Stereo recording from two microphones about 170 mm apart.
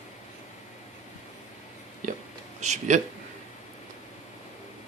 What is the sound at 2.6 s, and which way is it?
Speech, 45° right (ahead or behind).